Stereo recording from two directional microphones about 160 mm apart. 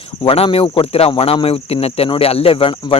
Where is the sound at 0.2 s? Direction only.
35° left (ahead or behind).